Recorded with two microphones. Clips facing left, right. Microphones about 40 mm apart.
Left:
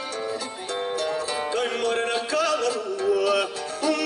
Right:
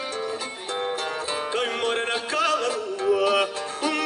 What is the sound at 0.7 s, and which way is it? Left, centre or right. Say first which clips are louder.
Music: left 1 dB; right.